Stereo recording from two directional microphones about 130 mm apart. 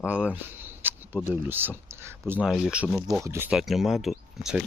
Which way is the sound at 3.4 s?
Centre (ahead or behind).